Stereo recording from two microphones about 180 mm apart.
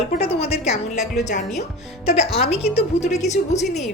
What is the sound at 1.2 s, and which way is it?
Speech, 45° left (ahead or behind).